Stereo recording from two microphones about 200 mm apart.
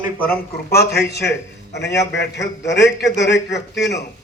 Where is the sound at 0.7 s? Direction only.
55° left (ahead or behind).